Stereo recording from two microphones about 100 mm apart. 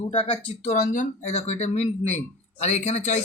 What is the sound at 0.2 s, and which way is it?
A man's voice, 85° left.